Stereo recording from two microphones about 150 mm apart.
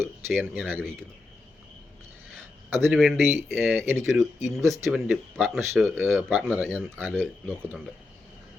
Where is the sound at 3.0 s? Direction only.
Centre (ahead or behind).